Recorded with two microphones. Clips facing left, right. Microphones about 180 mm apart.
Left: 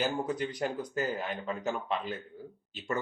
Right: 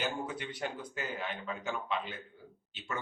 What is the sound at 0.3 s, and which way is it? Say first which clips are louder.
Speech: left 6 dB; 40° left (ahead or behind).